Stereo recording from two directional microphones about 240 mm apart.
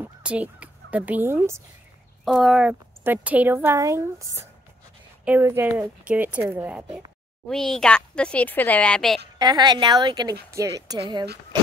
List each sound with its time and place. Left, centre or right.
0.0 s a woman's voice: centre
9.4 s a woman's voice: centre